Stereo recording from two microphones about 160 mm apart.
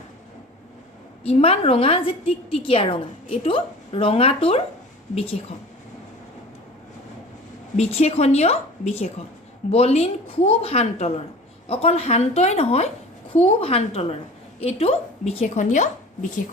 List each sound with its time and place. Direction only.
1.2 s a woman's voice: 35° left (ahead or behind)
7.8 s a woman's voice: 40° left (ahead or behind)